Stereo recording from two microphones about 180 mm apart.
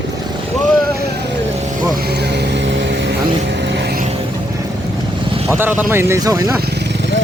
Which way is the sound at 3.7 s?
65° right (ahead or behind).